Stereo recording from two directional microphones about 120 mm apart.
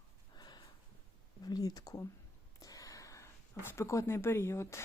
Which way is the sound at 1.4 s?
35° left (ahead or behind).